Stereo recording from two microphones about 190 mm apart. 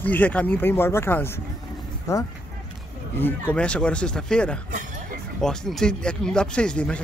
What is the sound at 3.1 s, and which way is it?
Speech, 10° left (ahead or behind).